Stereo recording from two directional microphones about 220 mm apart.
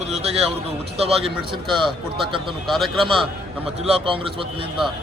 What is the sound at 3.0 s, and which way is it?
A man's voice, 25° right (ahead or behind).